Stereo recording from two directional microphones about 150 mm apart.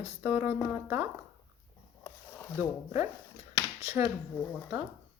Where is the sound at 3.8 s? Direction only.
15° right (ahead or behind).